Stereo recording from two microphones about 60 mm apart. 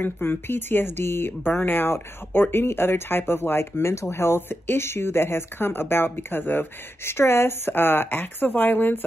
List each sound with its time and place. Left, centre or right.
0.0 s speech: left
7.1 s speech: left